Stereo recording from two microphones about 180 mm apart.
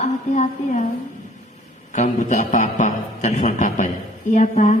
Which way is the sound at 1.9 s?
45° left (ahead or behind).